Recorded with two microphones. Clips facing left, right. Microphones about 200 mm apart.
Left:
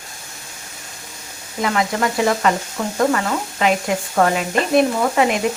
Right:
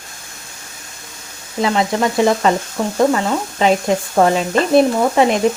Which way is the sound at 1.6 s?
25° right (ahead or behind).